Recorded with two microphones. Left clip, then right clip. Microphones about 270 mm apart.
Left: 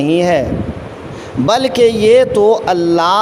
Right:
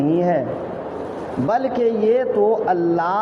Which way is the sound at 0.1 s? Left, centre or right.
Left.